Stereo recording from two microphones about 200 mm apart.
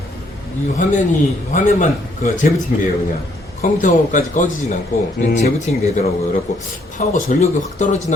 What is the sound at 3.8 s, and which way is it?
Speech, 40° left (ahead or behind).